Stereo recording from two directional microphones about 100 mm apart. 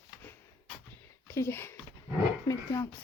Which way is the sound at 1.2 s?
25° left (ahead or behind).